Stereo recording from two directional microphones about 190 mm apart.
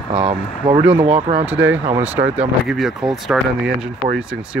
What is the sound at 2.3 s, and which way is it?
Speech, 5° right (ahead or behind).